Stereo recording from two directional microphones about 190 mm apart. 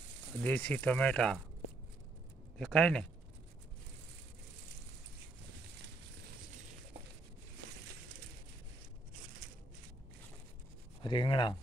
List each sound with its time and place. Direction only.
0.4 s speech: 10° left (ahead or behind)
2.6 s speech: 5° left (ahead or behind)
11.0 s speech: 25° left (ahead or behind)